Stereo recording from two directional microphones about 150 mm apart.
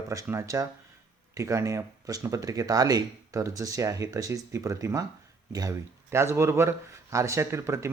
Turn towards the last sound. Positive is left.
turn(degrees=-20)  # may be behind; listen again after turning